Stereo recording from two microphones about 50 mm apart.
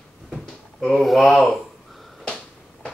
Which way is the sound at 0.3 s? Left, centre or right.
Centre.